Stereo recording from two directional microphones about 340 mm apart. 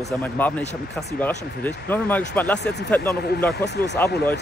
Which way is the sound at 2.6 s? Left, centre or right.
Left.